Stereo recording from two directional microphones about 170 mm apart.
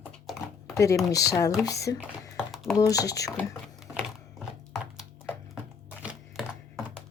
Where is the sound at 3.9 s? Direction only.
5° right (ahead or behind).